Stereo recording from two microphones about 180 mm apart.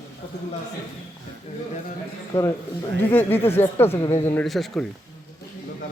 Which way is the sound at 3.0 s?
10° left (ahead or behind).